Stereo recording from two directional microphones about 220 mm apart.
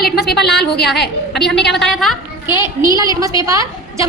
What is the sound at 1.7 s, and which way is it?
Speech, centre (ahead or behind).